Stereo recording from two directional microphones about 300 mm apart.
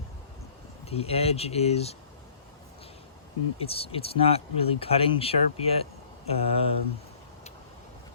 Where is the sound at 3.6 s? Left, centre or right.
Centre.